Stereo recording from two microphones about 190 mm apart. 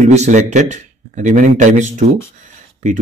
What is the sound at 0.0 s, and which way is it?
Speech, 40° right (ahead or behind).